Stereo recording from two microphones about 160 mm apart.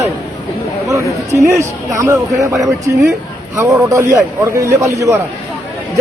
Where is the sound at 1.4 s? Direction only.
20° right (ahead or behind).